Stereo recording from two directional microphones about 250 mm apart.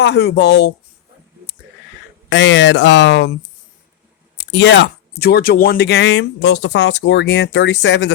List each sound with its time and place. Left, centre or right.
0.0 s speech: left
2.3 s speech: left
4.4 s speech: left